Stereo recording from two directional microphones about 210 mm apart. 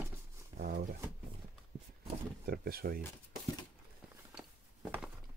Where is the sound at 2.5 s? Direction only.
45° right (ahead or behind).